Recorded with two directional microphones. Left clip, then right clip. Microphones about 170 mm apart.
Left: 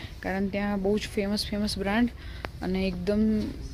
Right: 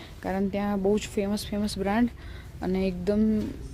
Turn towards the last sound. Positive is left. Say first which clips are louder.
# right 1 dB
turn(degrees=-15)  # may be behind; listen again after turning